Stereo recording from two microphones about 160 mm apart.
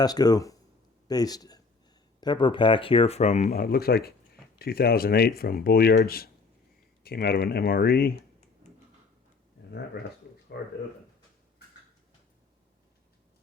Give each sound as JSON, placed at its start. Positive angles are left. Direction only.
{"t": 0.0, "sound": "a man's voice", "side_deg": 25}
{"t": 3.5, "sound": "speech", "side_deg": 70}
{"t": 10.5, "sound": "speech", "side_deg": 90}